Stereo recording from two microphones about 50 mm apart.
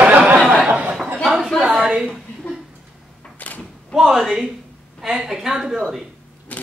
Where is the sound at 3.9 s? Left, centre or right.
Centre.